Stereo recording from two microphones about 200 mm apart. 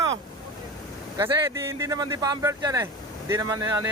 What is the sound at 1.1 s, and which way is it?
Speech, 15° right (ahead or behind).